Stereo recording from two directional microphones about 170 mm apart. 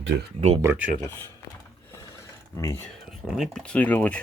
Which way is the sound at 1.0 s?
15° left (ahead or behind).